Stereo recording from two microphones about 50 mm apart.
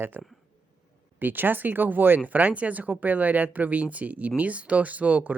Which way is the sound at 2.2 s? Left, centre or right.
Right.